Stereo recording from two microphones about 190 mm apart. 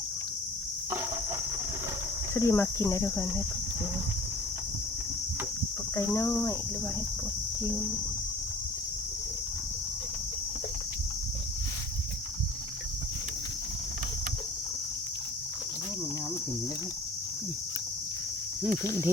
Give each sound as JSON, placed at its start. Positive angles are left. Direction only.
{"t": 2.3, "sound": "speech", "side_deg": 15}
{"t": 6.1, "sound": "speech", "side_deg": 15}
{"t": 7.6, "sound": "speech", "side_deg": 10}
{"t": 18.8, "sound": "speech", "side_deg": 15}